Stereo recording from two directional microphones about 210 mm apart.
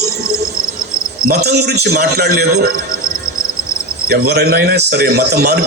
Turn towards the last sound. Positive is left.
turn(degrees=-50)  # may be behind; listen again after turning